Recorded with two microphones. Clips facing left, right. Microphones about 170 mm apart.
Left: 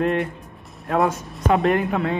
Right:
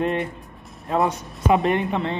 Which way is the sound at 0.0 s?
Centre (ahead or behind).